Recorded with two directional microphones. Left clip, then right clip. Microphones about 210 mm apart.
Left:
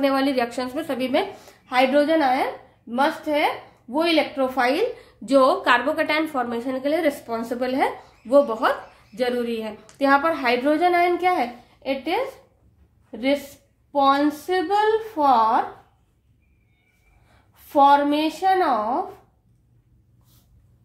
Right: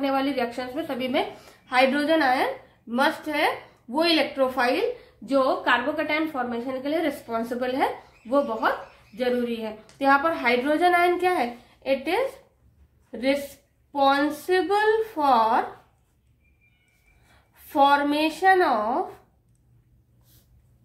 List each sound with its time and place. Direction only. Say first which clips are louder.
0.0 s a woman's voice: left 4 dB; 40° left (ahead or behind)
1.7 s a woman's voice: left 2 dB; 20° left (ahead or behind)
4.6 s a woman's voice: left 5 dB; 25° left (ahead or behind)
5.2 s a woman's voice: left 5 dB; 45° left (ahead or behind); by 12.2 s 15° left (ahead or behind)
13.9 s a woman's voice: left 3 dB; 10° left (ahead or behind)
17.6 s a woman's voice: left 4 dB; 10° left (ahead or behind)